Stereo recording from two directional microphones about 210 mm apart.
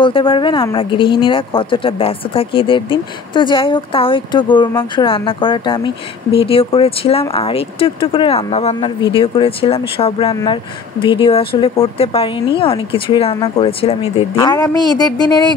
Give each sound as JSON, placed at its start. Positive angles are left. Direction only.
{"t": 0.0, "sound": "speech", "side_deg": 25}